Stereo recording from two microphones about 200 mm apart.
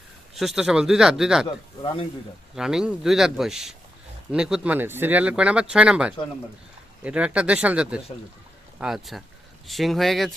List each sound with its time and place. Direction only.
0.3 s speech: centre (ahead or behind)
1.8 s speech: 20° left (ahead or behind)
2.6 s speech: 5° right (ahead or behind)